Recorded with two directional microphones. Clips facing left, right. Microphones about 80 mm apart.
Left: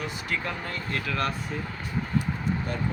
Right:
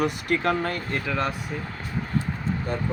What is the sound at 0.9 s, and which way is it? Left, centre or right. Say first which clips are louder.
Speech: right 1 dB; centre.